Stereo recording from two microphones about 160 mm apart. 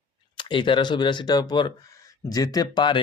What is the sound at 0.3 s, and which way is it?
Speech, 30° left (ahead or behind).